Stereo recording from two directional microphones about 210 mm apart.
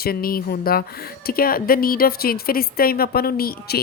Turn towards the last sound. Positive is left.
turn(degrees=45)  # may be behind; listen again after turning